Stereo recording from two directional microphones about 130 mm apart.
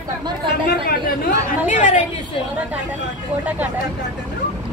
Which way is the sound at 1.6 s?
70° left (ahead or behind).